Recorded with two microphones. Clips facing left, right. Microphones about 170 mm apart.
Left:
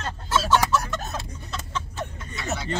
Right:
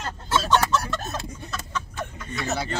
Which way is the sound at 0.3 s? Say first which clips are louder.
Even; centre (ahead or behind).